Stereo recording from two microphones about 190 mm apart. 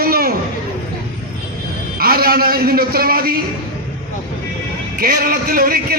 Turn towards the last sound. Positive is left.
turn(degrees=-50)  # may be behind; listen again after turning